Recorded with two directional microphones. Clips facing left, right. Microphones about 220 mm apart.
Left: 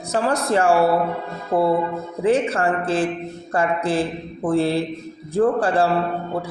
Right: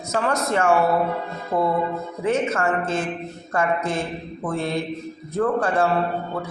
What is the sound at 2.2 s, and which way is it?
A man's voice, 30° left (ahead or behind).